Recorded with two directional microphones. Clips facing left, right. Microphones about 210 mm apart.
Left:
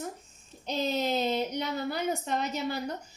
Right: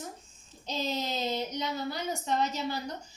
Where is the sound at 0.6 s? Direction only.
60° left (ahead or behind).